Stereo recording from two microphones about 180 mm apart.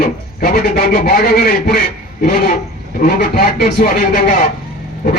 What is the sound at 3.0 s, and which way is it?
A man's voice, 60° left (ahead or behind).